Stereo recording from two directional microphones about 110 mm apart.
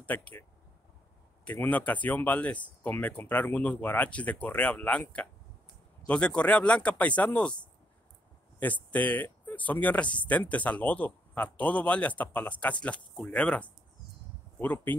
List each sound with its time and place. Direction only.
0.0 s speech: 15° left (ahead or behind)
8.5 s speech: 15° left (ahead or behind)